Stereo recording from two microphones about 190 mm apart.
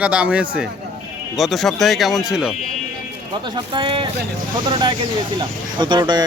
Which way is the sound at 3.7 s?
25° right (ahead or behind).